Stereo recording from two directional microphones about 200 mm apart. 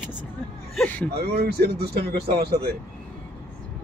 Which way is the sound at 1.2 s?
55° right (ahead or behind).